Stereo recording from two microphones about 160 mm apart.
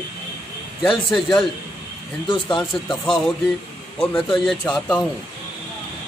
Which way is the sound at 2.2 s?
30° left (ahead or behind).